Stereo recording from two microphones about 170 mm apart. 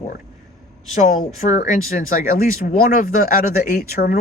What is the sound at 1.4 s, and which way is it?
Speech, 45° left (ahead or behind).